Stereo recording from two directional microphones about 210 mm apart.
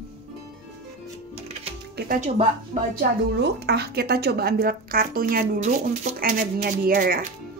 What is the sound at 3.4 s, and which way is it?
Speech, 50° right (ahead or behind).